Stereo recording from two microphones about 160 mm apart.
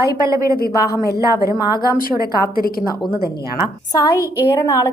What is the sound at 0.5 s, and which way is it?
Speech, 75° left (ahead or behind).